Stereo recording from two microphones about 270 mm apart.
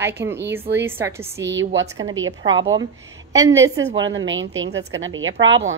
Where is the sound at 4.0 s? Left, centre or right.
Right.